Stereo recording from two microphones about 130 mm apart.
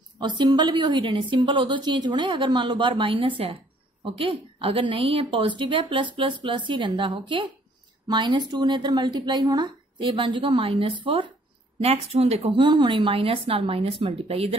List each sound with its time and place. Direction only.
0.2 s a woman's voice: 35° right (ahead or behind)